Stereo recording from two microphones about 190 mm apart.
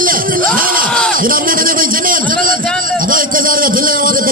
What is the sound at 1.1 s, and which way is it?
Music, 50° right (ahead or behind).